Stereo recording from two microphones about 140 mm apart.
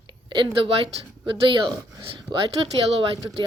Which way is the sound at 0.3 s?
35° right (ahead or behind).